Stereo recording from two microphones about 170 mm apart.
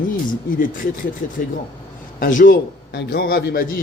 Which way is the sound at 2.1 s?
55° left (ahead or behind).